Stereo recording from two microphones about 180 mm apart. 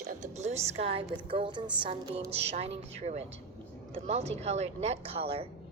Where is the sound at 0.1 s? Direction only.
40° right (ahead or behind).